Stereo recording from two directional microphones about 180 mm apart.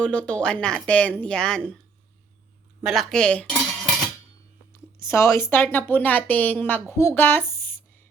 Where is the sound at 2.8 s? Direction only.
Centre (ahead or behind).